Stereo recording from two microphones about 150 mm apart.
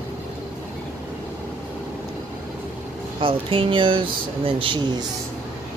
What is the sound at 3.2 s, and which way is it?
Speech, 35° right (ahead or behind).